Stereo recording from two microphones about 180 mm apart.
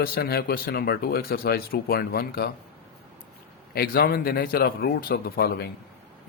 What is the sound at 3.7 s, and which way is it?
Speech, 60° left (ahead or behind).